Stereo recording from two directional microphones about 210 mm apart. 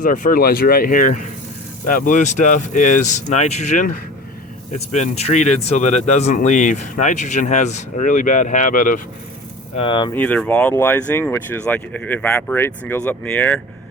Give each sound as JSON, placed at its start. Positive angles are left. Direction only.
{"t": 0.0, "sound": "speech", "side_deg": 40}
{"t": 9.7, "sound": "speech", "side_deg": 25}
{"t": 10.2, "sound": "speech", "side_deg": 5}